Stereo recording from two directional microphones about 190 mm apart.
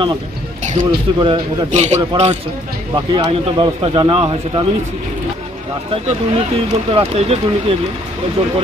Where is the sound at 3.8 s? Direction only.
30° right (ahead or behind).